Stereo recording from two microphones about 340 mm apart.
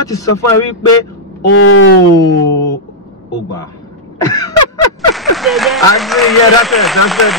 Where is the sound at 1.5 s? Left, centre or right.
Left.